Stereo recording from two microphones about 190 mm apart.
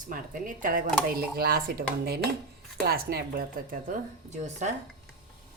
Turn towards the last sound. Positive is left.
turn(degrees=-40)  # may be behind; listen again after turning